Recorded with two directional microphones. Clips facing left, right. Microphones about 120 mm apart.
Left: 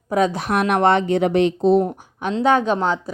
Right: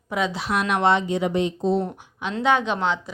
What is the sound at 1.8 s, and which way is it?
Speech, 45° left (ahead or behind).